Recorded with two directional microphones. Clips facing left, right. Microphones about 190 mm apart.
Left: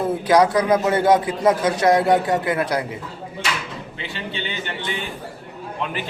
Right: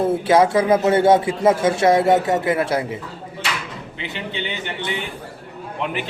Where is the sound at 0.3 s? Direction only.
25° right (ahead or behind).